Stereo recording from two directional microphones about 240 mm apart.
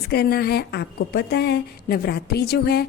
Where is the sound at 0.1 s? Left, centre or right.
Left.